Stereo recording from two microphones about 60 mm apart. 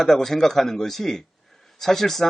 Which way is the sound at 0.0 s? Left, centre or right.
Centre.